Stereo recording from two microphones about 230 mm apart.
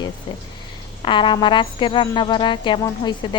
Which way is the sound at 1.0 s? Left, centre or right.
Left.